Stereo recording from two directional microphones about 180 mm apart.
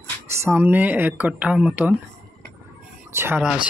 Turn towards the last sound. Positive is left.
turn(degrees=-10)  # may be behind; listen again after turning